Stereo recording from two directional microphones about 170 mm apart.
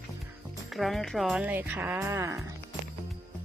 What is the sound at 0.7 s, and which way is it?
Speech, centre (ahead or behind).